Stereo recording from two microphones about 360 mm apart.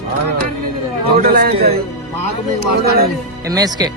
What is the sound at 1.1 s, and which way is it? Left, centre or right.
Speech, right.